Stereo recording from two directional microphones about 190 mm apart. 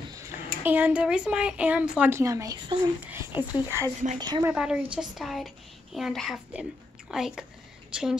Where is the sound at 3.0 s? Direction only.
10° right (ahead or behind).